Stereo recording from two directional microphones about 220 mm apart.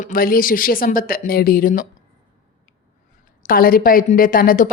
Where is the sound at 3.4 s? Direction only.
40° left (ahead or behind).